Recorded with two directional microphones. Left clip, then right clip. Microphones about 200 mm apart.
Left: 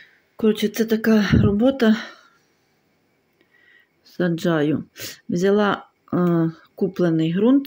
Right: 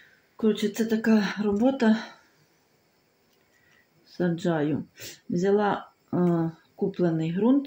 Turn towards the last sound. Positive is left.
turn(degrees=55)  # may be behind; listen again after turning